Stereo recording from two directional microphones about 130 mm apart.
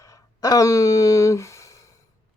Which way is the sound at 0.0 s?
25° left (ahead or behind).